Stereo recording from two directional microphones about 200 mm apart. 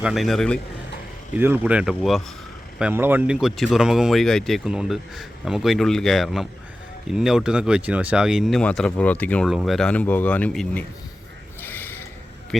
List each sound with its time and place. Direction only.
0.0 s speech: centre (ahead or behind)
1.3 s speech: 10° right (ahead or behind)
11.6 s mechanisms: 10° left (ahead or behind)